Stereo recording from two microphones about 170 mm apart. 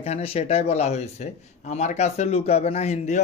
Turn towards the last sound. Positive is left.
turn(degrees=40)  # may be behind; listen again after turning